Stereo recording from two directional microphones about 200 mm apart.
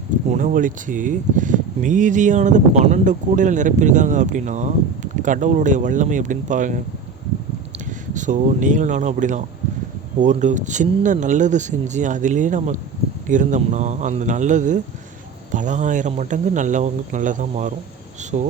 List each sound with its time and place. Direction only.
0.3 s speech: 40° right (ahead or behind)
8.1 s speech: 40° right (ahead or behind)